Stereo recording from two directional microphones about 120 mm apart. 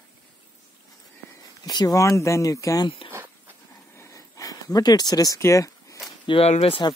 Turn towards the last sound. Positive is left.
turn(degrees=55)  # may be behind; listen again after turning